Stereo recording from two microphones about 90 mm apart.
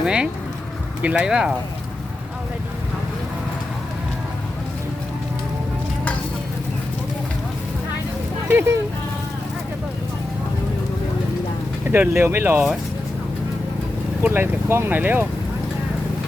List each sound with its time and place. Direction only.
0.0 s speech: 10° right (ahead or behind)
8.4 s speech: 30° right (ahead or behind)
11.9 s speech: 25° right (ahead or behind)
14.2 s speech: 25° right (ahead or behind)